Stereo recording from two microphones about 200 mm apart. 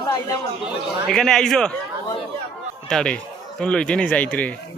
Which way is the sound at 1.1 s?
Centre (ahead or behind).